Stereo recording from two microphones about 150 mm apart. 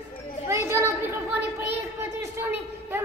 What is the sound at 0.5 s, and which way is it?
Children playing, 20° right (ahead or behind).